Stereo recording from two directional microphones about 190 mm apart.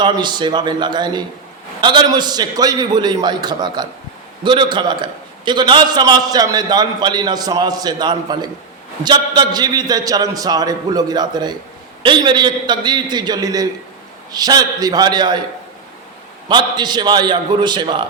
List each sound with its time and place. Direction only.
0.0 s a man's voice: 25° right (ahead or behind)
16.5 s a man's voice: 25° right (ahead or behind)